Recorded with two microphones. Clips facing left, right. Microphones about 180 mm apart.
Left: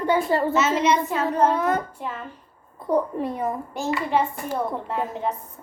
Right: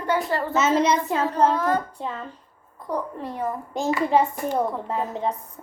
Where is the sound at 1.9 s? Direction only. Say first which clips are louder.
Right 1 dB; 30° right (ahead or behind).